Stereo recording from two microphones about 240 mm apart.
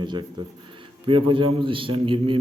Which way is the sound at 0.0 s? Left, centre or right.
Centre.